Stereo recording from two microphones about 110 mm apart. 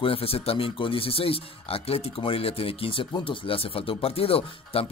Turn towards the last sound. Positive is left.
turn(degrees=60)  # may be behind; listen again after turning